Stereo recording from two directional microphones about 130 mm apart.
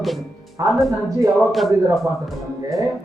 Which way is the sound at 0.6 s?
25° right (ahead or behind).